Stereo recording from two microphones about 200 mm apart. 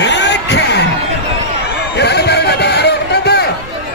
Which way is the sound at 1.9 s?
55° left (ahead or behind).